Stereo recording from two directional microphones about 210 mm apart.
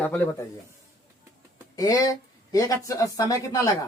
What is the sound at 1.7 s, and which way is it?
Speech, 15° left (ahead or behind).